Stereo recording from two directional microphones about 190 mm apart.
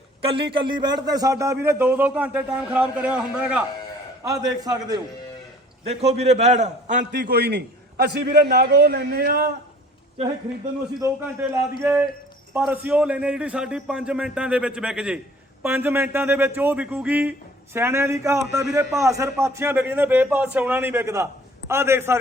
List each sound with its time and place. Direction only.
0.2 s a man's voice: 30° right (ahead or behind); by 3.6 s 5° right (ahead or behind)
4.2 s a man's voice: 20° right (ahead or behind)
5.8 s a man's voice: 35° right (ahead or behind)
7.1 s a man's voice: 50° right (ahead or behind)
11.0 s a man's voice: 15° right (ahead or behind)